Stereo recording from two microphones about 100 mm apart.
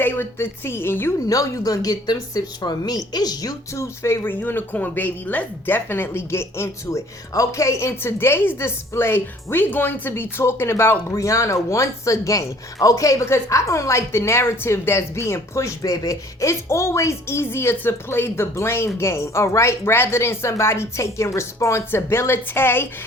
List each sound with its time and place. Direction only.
0.0 s a woman's voice: 25° left (ahead or behind)
1.3 s speech: 35° left (ahead or behind)
3.8 s speech: 25° left (ahead or behind)